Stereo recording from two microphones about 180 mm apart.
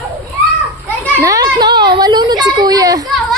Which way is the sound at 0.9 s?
10° left (ahead or behind).